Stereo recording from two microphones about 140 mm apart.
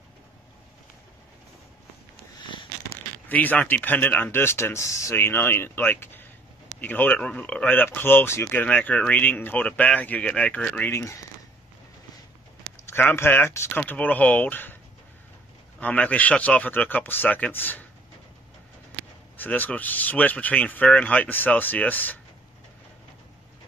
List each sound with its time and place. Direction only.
2.4 s a sound: 35° left (ahead or behind)
3.3 s speech: 10° left (ahead or behind)
12.8 s speech: 15° left (ahead or behind)
15.8 s speech: 10° left (ahead or behind)
19.3 s speech: 10° left (ahead or behind)